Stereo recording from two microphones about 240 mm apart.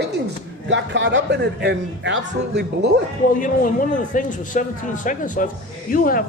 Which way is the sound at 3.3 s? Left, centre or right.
Left.